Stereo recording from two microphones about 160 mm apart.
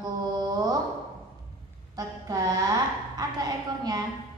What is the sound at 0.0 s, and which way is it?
Mantra, 25° right (ahead or behind).